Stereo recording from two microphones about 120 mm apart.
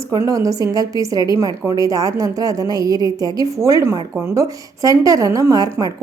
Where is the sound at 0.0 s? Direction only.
25° right (ahead or behind).